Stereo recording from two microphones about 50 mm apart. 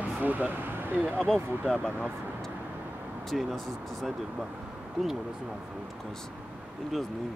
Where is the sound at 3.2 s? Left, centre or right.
Centre.